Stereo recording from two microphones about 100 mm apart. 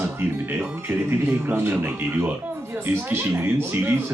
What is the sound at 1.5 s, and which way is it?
Speech, 20° right (ahead or behind).